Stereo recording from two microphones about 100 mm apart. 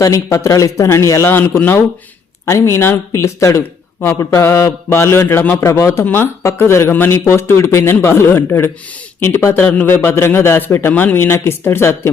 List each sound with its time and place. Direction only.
0.0 s a man's voice: 30° left (ahead or behind)